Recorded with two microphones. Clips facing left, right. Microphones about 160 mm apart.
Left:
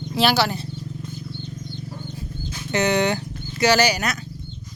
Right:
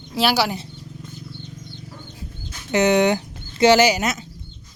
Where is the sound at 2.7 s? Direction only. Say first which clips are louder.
Right 4 dB; 15° right (ahead or behind).